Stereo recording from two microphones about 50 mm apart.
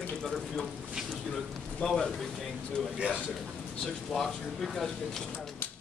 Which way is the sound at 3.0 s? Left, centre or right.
Right.